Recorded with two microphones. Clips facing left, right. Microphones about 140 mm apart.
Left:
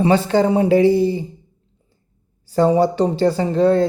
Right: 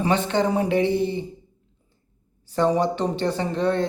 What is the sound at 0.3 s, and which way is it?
Speech, 30° left (ahead or behind).